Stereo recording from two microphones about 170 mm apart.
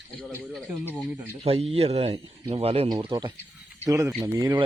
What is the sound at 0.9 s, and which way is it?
Speech, 10° right (ahead or behind).